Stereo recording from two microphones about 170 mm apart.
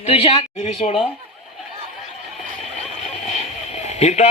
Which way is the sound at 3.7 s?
40° left (ahead or behind).